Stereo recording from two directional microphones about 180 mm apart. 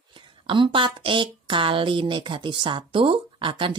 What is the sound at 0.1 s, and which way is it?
Speech, 25° right (ahead or behind).